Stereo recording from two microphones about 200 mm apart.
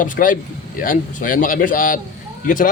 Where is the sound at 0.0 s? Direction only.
45° left (ahead or behind).